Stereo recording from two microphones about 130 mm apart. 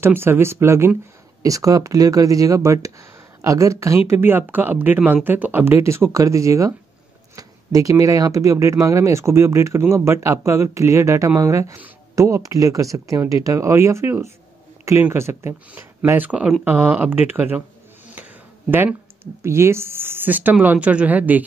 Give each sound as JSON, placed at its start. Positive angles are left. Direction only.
{"t": 0.0, "sound": "a woman's voice", "side_deg": -20}